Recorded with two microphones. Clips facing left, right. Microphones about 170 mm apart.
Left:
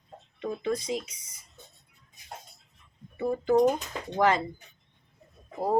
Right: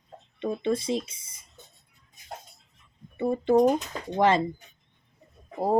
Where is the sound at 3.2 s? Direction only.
30° right (ahead or behind).